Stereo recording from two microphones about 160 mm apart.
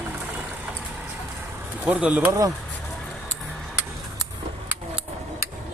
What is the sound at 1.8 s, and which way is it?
Speech, 5° right (ahead or behind).